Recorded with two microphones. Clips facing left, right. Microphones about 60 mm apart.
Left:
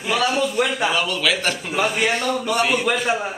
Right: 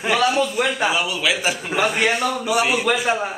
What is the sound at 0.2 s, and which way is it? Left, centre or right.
A man's voice, centre.